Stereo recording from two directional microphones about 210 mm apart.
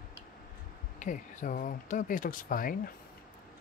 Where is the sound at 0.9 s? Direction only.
35° left (ahead or behind).